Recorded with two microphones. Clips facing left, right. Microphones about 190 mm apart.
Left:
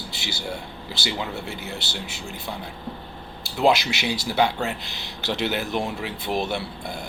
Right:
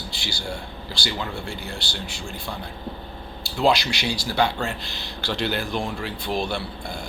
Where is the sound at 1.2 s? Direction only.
20° left (ahead or behind).